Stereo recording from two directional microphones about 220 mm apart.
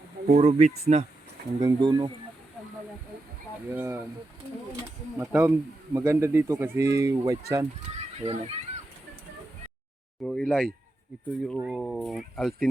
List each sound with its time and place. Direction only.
0.3 s speech: 30° right (ahead or behind)
1.6 s speech: 20° right (ahead or behind)
3.7 s speech: 10° right (ahead or behind)
5.1 s speech: 10° right (ahead or behind)
7.9 s speech: 30° right (ahead or behind)
10.2 s speech: centre (ahead or behind)